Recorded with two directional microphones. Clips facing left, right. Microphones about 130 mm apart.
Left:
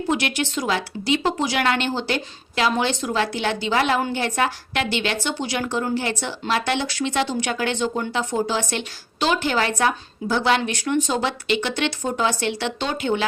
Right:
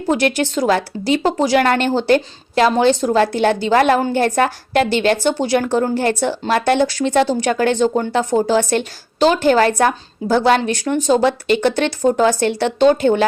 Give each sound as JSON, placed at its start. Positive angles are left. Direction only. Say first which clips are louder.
{"t": 0.1, "sound": "speech", "louder": "right 8 dB", "side_deg": -40}